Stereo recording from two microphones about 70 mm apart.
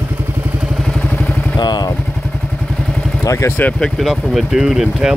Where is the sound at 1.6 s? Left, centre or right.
Left.